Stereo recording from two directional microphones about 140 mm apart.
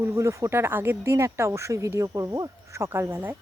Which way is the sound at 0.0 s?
20° right (ahead or behind).